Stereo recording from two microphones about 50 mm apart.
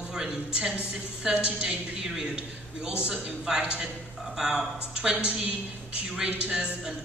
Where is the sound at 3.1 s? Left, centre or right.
Centre.